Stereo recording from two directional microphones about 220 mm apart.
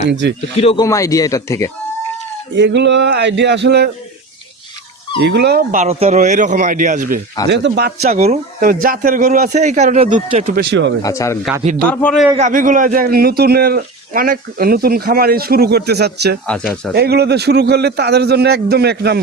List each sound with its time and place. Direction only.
0.0 s speech: 50° right (ahead or behind)
0.6 s speech: 25° left (ahead or behind)
0.9 s speech: 15° left (ahead or behind)
2.6 s speech: 50° right (ahead or behind)
5.2 s speech: 50° right (ahead or behind)
7.5 s speech: 50° right (ahead or behind); by 10.6 s 30° right (ahead or behind)
10.7 s speech: 55° right (ahead or behind)
11.0 s speech: 15° left (ahead or behind)
11.6 s speech: 35° right (ahead or behind)
11.9 s speech: 5° left (ahead or behind)
12.4 s speech: 35° right (ahead or behind)
16.5 s speech: 5° left (ahead or behind)
16.9 s speech: 45° right (ahead or behind)